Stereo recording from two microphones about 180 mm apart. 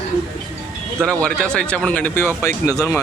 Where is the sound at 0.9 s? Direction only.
5° left (ahead or behind).